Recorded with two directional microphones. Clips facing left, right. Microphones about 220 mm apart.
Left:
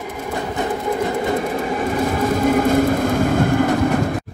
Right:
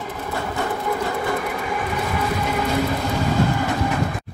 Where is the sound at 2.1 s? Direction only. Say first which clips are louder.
Left 8 dB; 50° left (ahead or behind).